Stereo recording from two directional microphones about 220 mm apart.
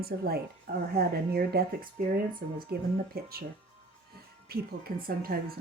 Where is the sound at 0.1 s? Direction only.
40° right (ahead or behind).